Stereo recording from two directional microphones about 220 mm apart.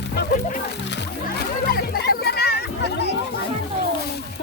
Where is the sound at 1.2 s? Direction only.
45° left (ahead or behind).